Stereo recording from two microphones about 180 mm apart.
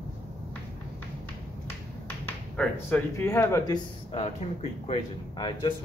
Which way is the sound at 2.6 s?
10° left (ahead or behind).